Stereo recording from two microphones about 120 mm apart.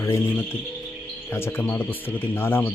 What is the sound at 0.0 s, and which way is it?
Speech, 20° left (ahead or behind).